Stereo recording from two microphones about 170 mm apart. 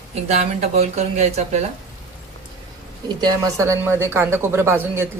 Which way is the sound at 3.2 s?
20° right (ahead or behind).